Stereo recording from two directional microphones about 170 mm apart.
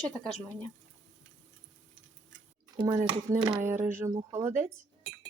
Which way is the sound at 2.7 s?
20° right (ahead or behind).